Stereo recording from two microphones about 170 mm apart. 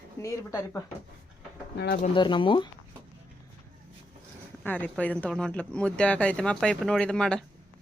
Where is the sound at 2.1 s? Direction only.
30° left (ahead or behind).